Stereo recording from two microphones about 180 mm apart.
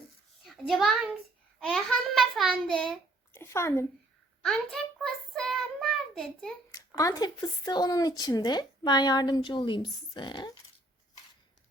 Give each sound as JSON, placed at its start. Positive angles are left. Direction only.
{"t": 0.4, "sound": "a child's voice", "side_deg": 0}
{"t": 3.3, "sound": "a woman's voice", "side_deg": 15}
{"t": 4.4, "sound": "child singing", "side_deg": 5}
{"t": 6.7, "sound": "speech", "side_deg": 20}